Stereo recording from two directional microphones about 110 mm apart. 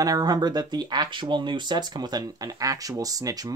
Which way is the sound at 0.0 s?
35° right (ahead or behind).